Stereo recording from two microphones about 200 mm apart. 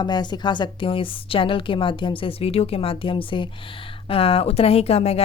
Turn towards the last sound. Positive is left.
turn(degrees=30)  # may be behind; listen again after turning